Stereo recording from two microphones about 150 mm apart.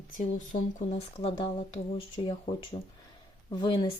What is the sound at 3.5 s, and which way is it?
Speech, 30° left (ahead or behind).